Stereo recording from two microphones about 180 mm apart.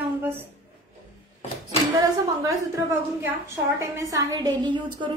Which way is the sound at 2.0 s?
20° right (ahead or behind).